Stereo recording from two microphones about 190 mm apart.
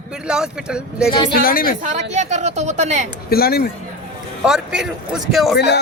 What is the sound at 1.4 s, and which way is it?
Speech, 50° left (ahead or behind).